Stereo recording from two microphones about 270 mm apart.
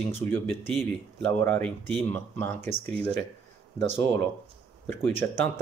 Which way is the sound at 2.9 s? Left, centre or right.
Centre.